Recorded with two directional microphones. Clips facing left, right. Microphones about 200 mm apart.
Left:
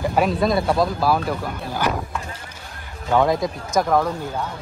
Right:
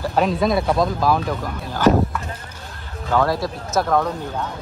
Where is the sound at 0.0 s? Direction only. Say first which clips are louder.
Even; 10° left (ahead or behind).